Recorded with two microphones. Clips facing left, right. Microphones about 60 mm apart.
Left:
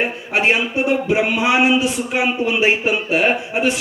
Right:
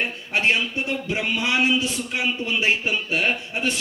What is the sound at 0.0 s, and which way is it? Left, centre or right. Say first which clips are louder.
A man's voice: left 5 dB; centre.